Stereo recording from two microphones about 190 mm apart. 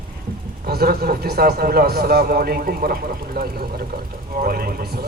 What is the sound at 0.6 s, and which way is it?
A man's voice, 55° right (ahead or behind).